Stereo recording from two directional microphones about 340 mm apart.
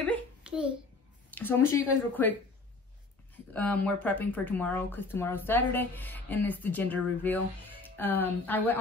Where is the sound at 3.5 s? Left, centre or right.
Centre.